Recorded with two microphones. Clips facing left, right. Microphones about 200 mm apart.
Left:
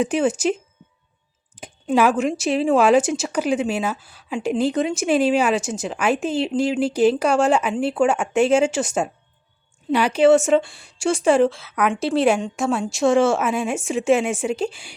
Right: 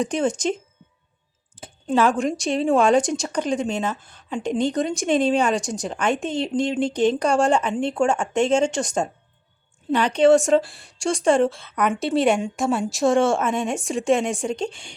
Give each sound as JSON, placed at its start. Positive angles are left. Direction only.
{"t": 0.0, "sound": "speech", "side_deg": 5}
{"t": 1.6, "sound": "a sound", "side_deg": 15}
{"t": 1.9, "sound": "speech", "side_deg": 5}